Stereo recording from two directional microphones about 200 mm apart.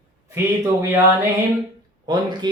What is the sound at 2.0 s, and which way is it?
Mantra, 20° right (ahead or behind).